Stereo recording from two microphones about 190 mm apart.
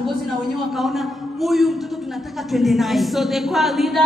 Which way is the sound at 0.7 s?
Centre (ahead or behind).